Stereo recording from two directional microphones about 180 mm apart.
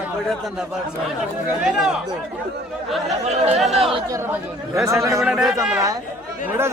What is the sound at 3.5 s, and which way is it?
Speech, centre (ahead or behind).